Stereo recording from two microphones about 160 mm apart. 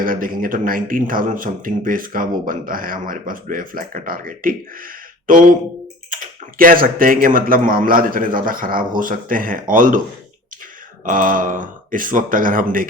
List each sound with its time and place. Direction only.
0.0 s speech: 60° right (ahead or behind)
11.0 s speech: 60° right (ahead or behind)